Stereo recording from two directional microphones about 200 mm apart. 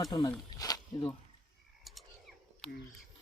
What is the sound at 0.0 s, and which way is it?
Speech, 20° left (ahead or behind).